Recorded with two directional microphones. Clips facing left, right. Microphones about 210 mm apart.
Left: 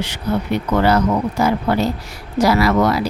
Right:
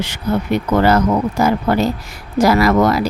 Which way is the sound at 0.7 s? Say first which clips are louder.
Right 2 dB; 45° right (ahead or behind).